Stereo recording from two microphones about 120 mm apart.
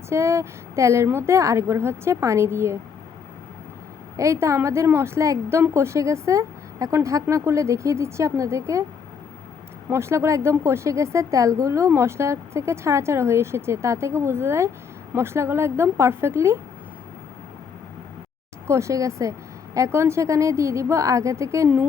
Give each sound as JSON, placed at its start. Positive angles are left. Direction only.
{"t": 0.1, "sound": "a woman's voice", "side_deg": -25}
{"t": 4.2, "sound": "a woman's voice", "side_deg": -25}
{"t": 9.9, "sound": "a woman's voice", "side_deg": -20}
{"t": 18.7, "sound": "a woman's voice", "side_deg": -25}